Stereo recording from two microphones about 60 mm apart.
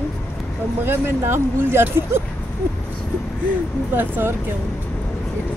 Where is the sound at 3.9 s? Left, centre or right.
Right.